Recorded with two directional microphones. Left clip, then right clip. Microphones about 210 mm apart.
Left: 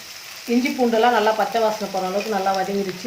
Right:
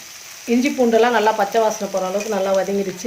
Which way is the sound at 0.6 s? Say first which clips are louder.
Right 3 dB; 50° right (ahead or behind).